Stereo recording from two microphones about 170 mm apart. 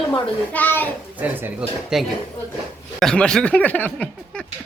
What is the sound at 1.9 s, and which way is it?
A man's voice, 5° right (ahead or behind).